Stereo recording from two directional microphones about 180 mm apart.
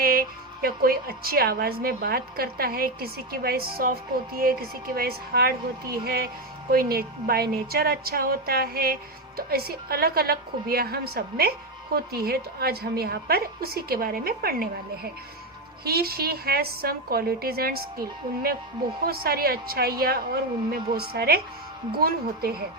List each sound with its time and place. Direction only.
0.0 s a woman's voice: 55° right (ahead or behind)
19.0 s a woman's voice: 55° right (ahead or behind)